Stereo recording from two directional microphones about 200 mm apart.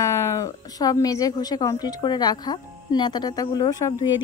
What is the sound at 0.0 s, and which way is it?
A woman's voice, 15° left (ahead or behind).